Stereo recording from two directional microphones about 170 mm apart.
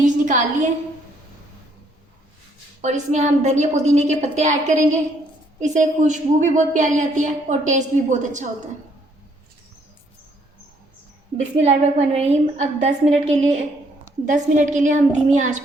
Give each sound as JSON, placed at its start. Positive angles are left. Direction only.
{"t": 0.0, "sound": "a sound", "side_deg": -45}
{"t": 2.8, "sound": "a woman's voice", "side_deg": -45}
{"t": 11.6, "sound": "a woman's voice", "side_deg": -40}